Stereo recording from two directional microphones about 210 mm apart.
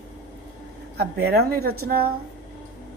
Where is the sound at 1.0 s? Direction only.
50° right (ahead or behind).